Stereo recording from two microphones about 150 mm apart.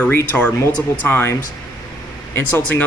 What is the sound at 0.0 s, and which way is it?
Speech, 10° left (ahead or behind).